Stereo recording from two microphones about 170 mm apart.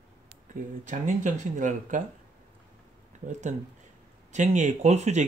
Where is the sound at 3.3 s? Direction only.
45° right (ahead or behind).